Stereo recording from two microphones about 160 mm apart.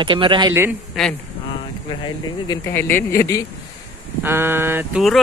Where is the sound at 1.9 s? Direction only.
30° left (ahead or behind).